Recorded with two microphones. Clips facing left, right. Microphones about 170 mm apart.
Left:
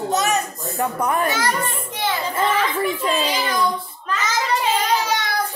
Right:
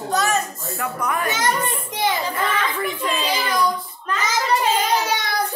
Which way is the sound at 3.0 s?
25° left (ahead or behind).